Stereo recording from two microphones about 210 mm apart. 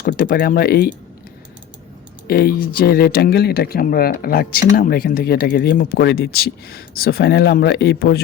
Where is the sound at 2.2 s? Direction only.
50° left (ahead or behind).